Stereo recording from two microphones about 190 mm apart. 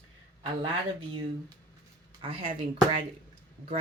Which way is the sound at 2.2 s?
30° right (ahead or behind).